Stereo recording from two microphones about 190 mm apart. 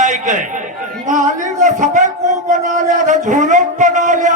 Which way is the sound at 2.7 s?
40° right (ahead or behind).